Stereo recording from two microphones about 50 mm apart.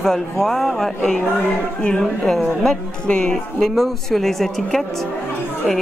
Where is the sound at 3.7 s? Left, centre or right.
Centre.